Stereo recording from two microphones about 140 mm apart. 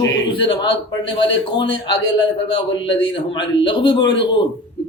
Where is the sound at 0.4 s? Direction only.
40° left (ahead or behind).